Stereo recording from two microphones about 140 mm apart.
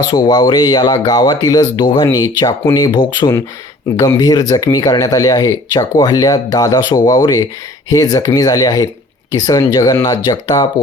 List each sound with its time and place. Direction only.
0.1 s speech: 30° left (ahead or behind)